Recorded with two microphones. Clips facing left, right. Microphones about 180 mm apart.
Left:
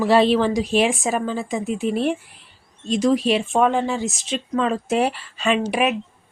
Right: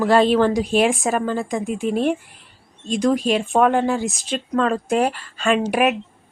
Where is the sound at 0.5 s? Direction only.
50° right (ahead or behind).